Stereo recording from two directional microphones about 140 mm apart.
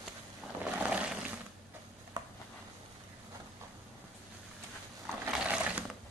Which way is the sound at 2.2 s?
30° right (ahead or behind).